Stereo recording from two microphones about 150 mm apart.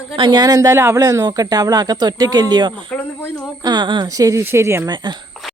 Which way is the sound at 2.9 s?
15° left (ahead or behind).